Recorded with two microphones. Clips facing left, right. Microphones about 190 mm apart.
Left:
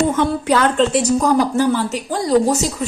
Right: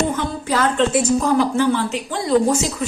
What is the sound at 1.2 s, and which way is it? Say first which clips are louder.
Speech: left 2 dB; 40° left (ahead or behind).